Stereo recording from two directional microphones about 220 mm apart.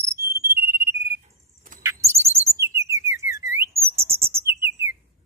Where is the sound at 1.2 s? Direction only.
35° right (ahead or behind).